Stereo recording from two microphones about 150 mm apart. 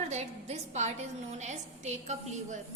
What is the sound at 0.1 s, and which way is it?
A woman's voice, 50° right (ahead or behind).